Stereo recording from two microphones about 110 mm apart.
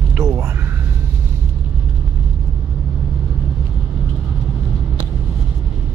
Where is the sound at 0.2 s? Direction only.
30° right (ahead or behind).